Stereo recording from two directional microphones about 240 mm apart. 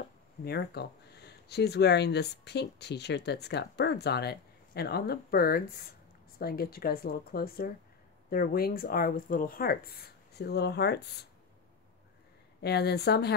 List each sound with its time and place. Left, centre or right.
0.5 s speech: left
12.6 s speech: left